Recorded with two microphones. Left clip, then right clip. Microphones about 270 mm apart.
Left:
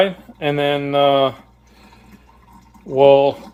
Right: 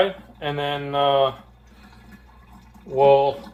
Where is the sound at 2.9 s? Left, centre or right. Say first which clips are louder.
Left 5 dB; left.